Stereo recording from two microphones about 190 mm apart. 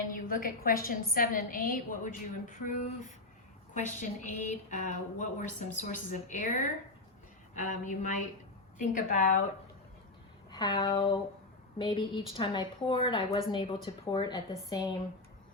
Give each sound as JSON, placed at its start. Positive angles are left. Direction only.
{"t": 0.1, "sound": "a woman's voice", "side_deg": 45}
{"t": 10.5, "sound": "a woman's voice", "side_deg": 20}